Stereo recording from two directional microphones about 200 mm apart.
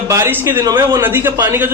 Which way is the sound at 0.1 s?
10° right (ahead or behind).